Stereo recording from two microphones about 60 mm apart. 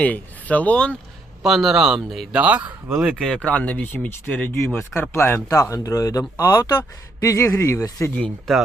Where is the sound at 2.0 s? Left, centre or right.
Centre.